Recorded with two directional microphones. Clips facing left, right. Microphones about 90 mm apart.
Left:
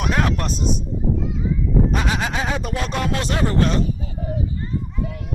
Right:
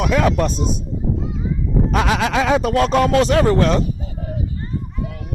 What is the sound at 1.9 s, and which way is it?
Speech, 90° right.